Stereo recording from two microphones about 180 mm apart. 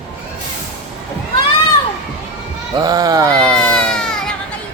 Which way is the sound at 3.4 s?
5° left (ahead or behind).